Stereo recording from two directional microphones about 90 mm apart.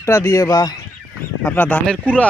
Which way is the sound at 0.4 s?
50° left (ahead or behind).